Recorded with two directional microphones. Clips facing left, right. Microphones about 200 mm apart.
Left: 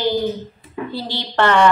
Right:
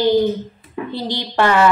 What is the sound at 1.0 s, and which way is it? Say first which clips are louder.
Speech: right 1 dB; 15° right (ahead or behind).